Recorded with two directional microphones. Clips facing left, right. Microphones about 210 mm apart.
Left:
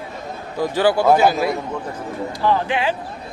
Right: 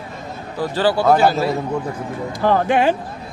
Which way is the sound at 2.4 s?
50° right (ahead or behind).